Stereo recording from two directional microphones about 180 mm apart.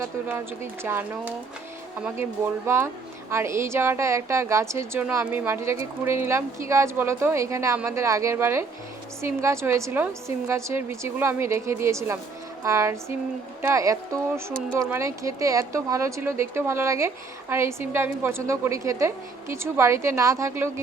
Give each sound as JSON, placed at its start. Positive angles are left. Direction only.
{"t": 0.0, "sound": "speech", "side_deg": -15}